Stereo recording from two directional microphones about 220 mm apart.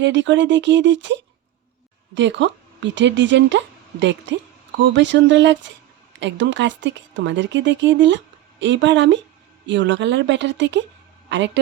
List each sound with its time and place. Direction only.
0.0 s speech: 55° right (ahead or behind)